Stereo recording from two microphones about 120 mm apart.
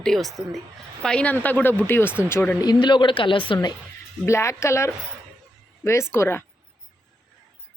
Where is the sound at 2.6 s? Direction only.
35° left (ahead or behind).